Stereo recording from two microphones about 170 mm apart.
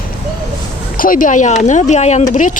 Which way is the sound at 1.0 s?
55° left (ahead or behind).